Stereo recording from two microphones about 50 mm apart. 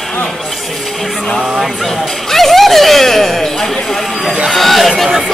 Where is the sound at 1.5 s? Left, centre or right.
Centre.